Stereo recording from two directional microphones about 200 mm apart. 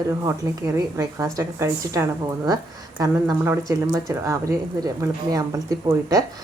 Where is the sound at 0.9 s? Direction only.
15° right (ahead or behind).